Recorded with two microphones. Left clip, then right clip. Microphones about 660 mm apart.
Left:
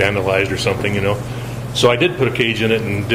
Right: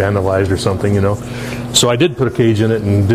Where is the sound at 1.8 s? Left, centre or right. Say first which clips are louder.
Even; right.